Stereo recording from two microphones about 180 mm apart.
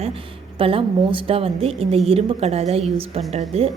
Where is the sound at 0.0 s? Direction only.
30° right (ahead or behind).